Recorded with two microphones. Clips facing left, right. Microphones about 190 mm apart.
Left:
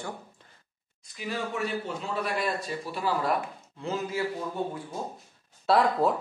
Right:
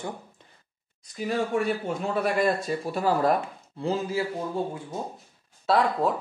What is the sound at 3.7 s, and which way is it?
Speech, 30° right (ahead or behind).